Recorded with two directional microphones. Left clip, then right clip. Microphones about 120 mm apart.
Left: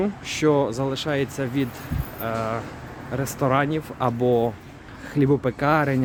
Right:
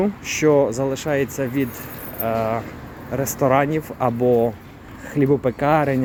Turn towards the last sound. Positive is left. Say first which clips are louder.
# right 3 dB
turn(degrees=15)  # may be behind; listen again after turning